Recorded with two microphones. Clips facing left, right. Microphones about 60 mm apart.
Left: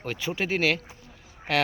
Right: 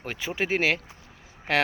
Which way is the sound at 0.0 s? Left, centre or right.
Right.